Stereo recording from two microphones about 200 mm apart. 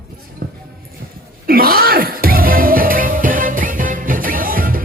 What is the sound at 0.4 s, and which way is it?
Music, 50° right (ahead or behind).